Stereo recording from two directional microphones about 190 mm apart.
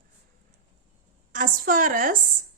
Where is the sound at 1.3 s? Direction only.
45° right (ahead or behind).